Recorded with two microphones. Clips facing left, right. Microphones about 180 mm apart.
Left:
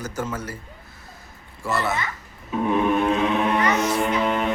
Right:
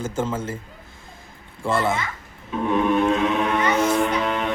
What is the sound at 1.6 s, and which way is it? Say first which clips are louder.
Speech: right 3 dB; 25° right (ahead or behind).